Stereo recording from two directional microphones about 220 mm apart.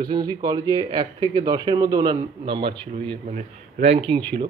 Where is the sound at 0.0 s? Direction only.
20° right (ahead or behind).